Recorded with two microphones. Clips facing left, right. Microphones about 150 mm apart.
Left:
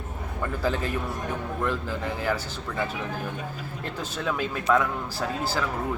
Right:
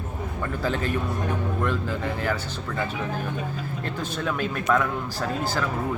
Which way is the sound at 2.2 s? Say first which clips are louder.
Even; 5° left (ahead or behind).